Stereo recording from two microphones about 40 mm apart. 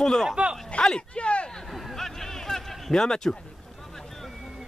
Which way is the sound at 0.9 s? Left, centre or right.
Left.